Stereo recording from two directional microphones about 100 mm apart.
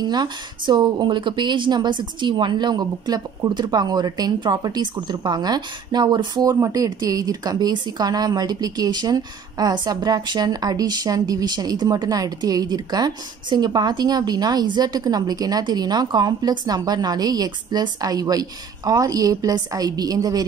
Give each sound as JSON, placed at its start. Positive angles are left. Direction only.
{"t": 0.0, "sound": "a woman's voice", "side_deg": -45}